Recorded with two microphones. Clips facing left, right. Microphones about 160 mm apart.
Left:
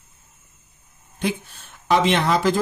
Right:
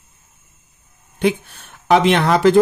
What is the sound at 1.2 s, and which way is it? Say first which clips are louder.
Speech: right 7 dB; 65° right (ahead or behind).